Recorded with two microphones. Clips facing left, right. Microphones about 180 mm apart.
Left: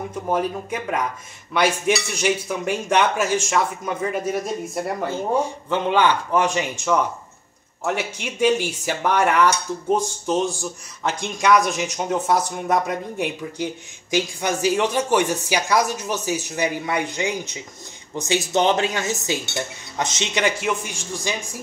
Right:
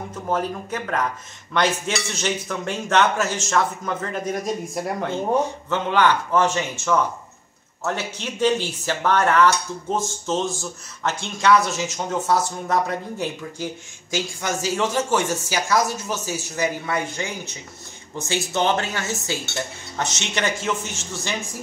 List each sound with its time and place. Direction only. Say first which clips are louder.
0.1 s speech: left 1 dB; 10° left (ahead or behind)